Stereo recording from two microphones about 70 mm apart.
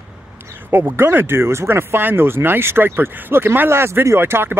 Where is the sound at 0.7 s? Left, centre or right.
Right.